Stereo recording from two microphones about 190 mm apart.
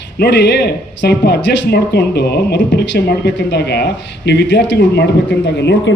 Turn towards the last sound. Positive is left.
turn(degrees=65)  # may be behind; listen again after turning